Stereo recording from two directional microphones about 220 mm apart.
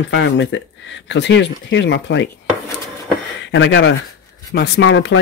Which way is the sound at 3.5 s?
55° left (ahead or behind).